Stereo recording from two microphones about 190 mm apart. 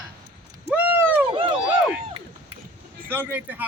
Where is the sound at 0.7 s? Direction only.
10° right (ahead or behind).